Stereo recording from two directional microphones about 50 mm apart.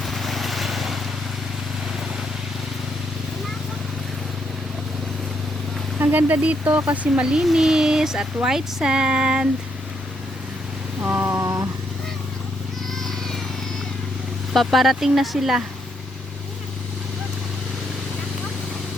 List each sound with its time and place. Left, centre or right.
0.0 s vehicle: centre
6.0 s speech: right
6.4 s speech: right
7.5 s speech: centre
11.0 s a sound: right
11.3 s vehicle: right
12.9 s cat: centre
14.5 s speech: centre